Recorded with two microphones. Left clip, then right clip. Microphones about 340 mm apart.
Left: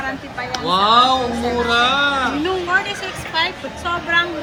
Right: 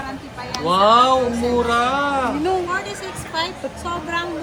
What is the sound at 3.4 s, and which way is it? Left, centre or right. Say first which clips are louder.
Speech: left 4 dB; centre.